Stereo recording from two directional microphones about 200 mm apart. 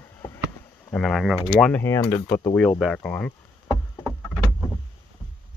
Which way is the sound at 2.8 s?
Centre (ahead or behind).